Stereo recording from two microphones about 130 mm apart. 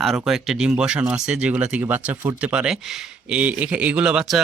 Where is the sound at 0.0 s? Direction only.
Centre (ahead or behind).